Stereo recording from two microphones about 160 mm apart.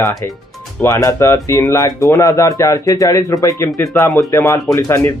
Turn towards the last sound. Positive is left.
turn(degrees=15)  # may be behind; listen again after turning